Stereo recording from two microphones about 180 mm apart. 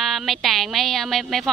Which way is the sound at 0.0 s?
Centre (ahead or behind).